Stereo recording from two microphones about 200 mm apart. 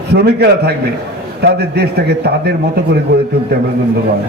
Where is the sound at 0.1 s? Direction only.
55° right (ahead or behind).